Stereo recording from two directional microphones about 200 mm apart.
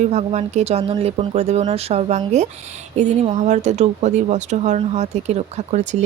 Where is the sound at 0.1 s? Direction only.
35° right (ahead or behind).